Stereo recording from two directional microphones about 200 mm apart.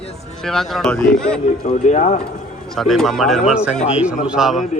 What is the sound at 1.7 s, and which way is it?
Speech, 35° left (ahead or behind).